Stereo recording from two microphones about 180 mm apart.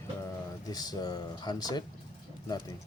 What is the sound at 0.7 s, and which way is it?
Speech, 20° left (ahead or behind).